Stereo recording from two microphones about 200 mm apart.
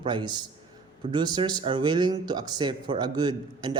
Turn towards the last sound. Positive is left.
turn(degrees=-20)  # may be behind; listen again after turning